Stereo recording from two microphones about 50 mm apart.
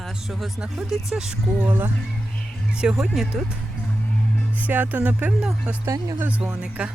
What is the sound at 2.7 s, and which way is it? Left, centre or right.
Speech, centre.